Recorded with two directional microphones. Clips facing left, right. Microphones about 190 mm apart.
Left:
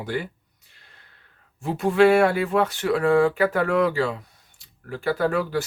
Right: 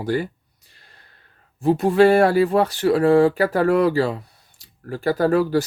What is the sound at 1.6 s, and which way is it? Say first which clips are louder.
Speech: right 3 dB; 35° right (ahead or behind).